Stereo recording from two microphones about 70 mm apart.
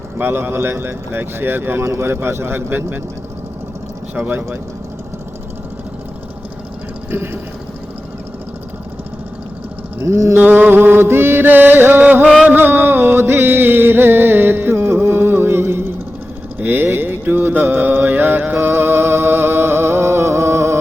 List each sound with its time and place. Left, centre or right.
0.2 s music: right
10.0 s music: right
10.3 s mantra: right
12.5 s music: right
16.6 s mantra: right